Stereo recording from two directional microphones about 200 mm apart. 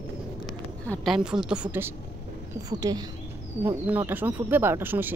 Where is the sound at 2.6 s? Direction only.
20° right (ahead or behind).